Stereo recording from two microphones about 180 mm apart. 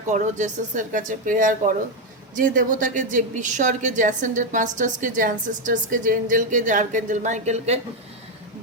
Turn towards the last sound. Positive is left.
turn(degrees=-40)  # may be behind; listen again after turning